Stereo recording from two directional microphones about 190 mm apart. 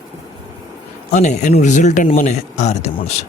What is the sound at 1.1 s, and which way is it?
Speech, 40° left (ahead or behind).